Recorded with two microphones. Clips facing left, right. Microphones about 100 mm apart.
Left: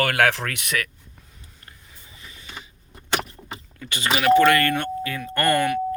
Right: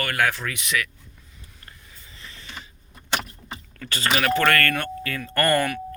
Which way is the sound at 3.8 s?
15° left (ahead or behind).